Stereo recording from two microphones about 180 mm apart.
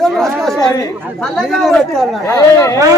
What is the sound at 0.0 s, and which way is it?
Chatter, centre (ahead or behind).